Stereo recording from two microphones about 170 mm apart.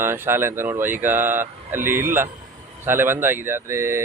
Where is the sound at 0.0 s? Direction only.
15° right (ahead or behind).